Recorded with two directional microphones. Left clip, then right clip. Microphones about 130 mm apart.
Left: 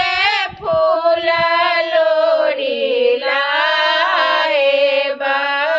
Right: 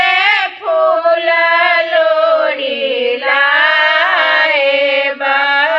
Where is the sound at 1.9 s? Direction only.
30° left (ahead or behind).